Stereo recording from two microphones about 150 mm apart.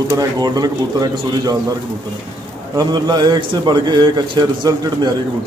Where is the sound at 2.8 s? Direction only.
30° right (ahead or behind).